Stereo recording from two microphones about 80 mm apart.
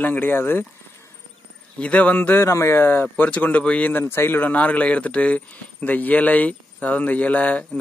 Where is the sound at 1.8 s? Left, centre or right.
Centre.